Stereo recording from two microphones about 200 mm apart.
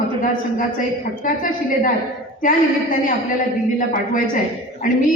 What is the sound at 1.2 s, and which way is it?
Speech, 45° left (ahead or behind).